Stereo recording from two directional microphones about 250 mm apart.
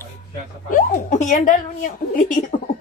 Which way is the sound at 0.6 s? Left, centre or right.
Left.